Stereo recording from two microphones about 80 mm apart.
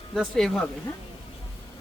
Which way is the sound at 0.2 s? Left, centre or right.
Centre.